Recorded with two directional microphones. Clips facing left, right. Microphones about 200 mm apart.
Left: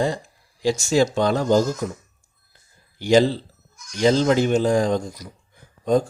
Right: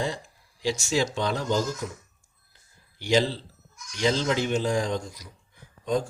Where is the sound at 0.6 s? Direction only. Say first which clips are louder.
Left 7 dB; 45° left (ahead or behind).